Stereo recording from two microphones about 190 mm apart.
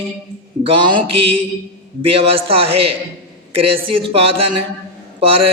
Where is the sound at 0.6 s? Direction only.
25° right (ahead or behind).